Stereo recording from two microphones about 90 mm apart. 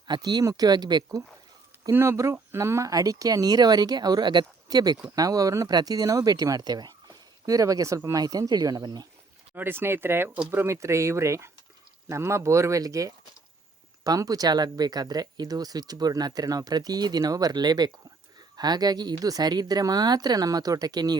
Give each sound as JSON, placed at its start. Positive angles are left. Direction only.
{"t": 0.1, "sound": "speech", "side_deg": -55}
{"t": 1.9, "sound": "speech", "side_deg": -30}
{"t": 9.6, "sound": "speech", "side_deg": -25}